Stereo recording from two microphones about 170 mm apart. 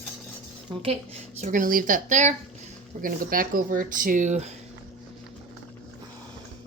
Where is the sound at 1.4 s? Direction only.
50° right (ahead or behind).